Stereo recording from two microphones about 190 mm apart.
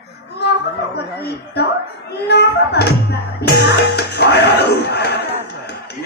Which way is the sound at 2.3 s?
60° left (ahead or behind).